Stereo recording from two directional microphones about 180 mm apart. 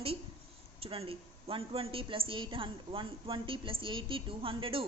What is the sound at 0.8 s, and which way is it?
A woman's voice, 30° right (ahead or behind).